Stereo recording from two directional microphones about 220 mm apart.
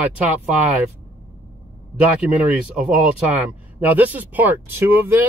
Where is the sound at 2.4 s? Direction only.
Centre (ahead or behind).